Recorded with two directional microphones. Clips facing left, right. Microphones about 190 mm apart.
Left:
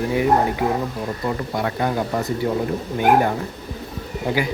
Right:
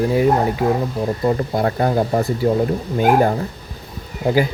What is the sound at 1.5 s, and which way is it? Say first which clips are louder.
Speech: right 4 dB; 35° right (ahead or behind).